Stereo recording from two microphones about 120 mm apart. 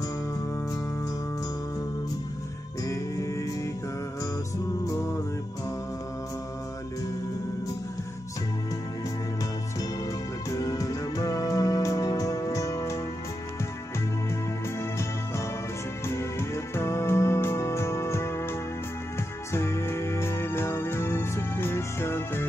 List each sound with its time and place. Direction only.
2.8 s music: 25° left (ahead or behind)
10.5 s music: 30° left (ahead or behind)
14.8 s music: 25° left (ahead or behind)